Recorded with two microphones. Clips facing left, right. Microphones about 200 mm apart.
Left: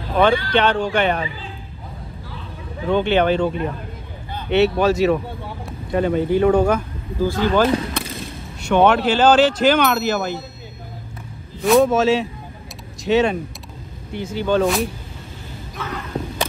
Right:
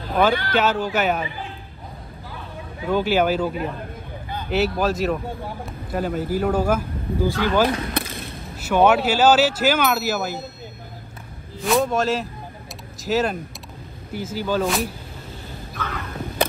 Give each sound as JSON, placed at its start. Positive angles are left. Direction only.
{"t": 0.2, "sound": "speech", "side_deg": -5}
{"t": 2.9, "sound": "speech", "side_deg": -5}
{"t": 11.6, "sound": "speech", "side_deg": 0}